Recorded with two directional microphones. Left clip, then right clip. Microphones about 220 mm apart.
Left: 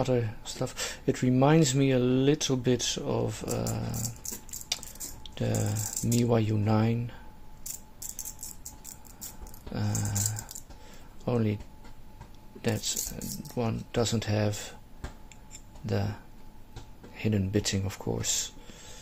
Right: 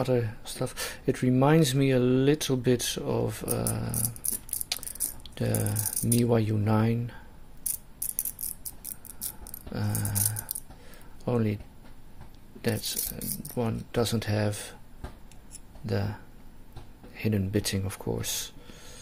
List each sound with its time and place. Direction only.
0.0 s speech: centre (ahead or behind)
5.2 s speech: 5° right (ahead or behind)
9.7 s a sound: centre (ahead or behind)
11.2 s speech: 5° right (ahead or behind)
12.6 s speech: centre (ahead or behind)
15.8 s speech: centre (ahead or behind)